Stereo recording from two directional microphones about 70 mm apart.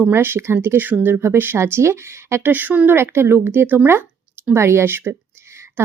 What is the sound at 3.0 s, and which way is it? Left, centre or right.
Speech, right.